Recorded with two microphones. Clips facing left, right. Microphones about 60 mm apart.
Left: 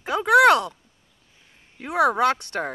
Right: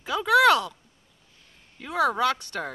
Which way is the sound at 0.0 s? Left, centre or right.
Left.